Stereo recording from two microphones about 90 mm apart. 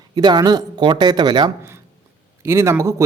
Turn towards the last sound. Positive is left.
turn(degrees=-30)  # may be behind; listen again after turning